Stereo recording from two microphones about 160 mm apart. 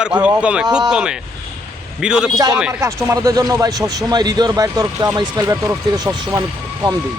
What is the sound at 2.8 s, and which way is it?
A man's voice, 20° right (ahead or behind).